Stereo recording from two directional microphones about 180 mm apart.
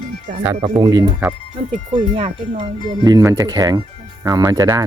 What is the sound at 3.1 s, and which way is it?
Speech, 20° right (ahead or behind).